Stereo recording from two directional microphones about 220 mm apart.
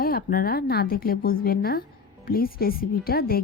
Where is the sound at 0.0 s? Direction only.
40° left (ahead or behind).